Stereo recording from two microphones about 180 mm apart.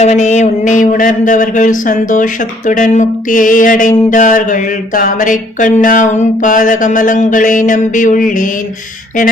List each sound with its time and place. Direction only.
0.0 s mantra: 40° left (ahead or behind)